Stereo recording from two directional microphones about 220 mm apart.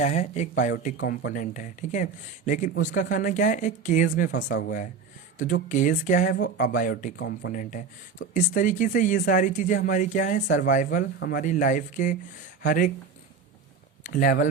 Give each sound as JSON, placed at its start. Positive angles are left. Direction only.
{"t": 0.0, "sound": "speech", "side_deg": 35}
{"t": 14.0, "sound": "speech", "side_deg": 35}